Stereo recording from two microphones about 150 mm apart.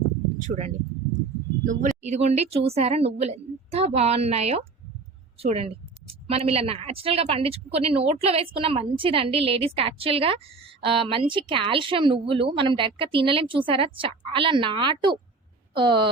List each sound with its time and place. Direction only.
0.4 s a woman's voice: 50° right (ahead or behind); by 16.0 s 35° right (ahead or behind)